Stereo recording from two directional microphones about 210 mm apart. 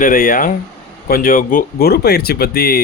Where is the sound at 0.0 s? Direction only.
40° left (ahead or behind).